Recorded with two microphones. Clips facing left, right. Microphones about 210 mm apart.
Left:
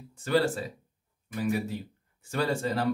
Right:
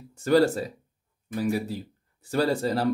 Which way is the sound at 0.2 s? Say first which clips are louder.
Right 5 dB; 40° right (ahead or behind).